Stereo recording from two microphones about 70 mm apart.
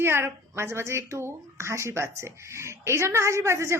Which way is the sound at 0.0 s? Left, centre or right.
Right.